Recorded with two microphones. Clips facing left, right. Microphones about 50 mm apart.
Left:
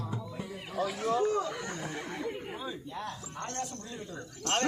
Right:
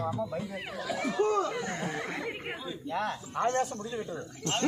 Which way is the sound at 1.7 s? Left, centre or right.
Right.